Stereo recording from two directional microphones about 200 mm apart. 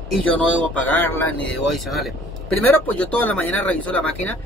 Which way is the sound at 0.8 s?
10° left (ahead or behind).